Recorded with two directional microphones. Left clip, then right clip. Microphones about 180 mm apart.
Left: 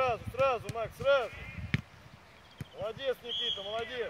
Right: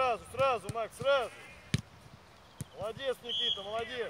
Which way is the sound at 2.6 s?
50° right (ahead or behind).